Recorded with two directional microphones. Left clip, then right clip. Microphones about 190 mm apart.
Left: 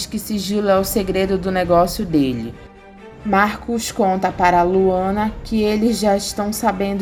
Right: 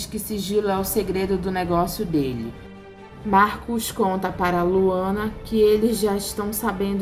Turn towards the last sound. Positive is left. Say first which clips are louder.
# left 6 dB
turn(degrees=30)  # may be behind; listen again after turning